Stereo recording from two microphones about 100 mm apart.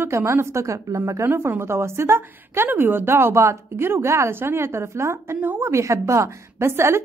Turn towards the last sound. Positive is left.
turn(degrees=-25)  # may be behind; listen again after turning